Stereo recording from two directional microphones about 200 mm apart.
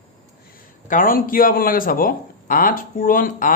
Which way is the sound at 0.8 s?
45° left (ahead or behind).